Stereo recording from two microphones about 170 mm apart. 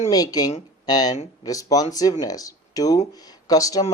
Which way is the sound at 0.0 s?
20° left (ahead or behind).